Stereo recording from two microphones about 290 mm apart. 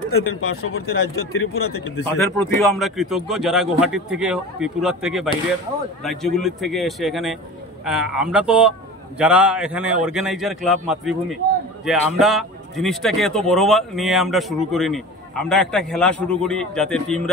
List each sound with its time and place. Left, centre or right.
0.1 s speech: left
2.1 s speech: centre